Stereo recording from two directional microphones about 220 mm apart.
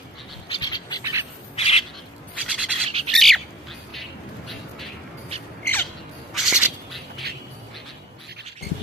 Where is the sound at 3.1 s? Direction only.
Centre (ahead or behind).